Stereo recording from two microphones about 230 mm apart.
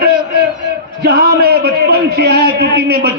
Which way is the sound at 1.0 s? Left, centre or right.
Right.